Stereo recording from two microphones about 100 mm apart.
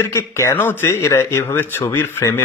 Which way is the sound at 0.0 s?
25° left (ahead or behind).